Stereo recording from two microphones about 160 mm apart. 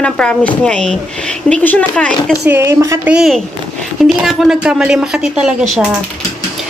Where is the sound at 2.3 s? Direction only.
15° right (ahead or behind).